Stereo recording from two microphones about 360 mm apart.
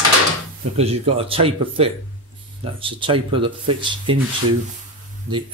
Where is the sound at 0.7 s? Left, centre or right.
Centre.